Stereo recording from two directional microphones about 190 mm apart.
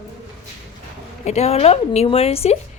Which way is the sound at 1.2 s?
35° left (ahead or behind).